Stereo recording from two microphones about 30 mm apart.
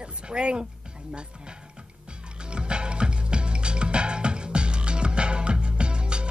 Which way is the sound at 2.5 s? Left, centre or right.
Right.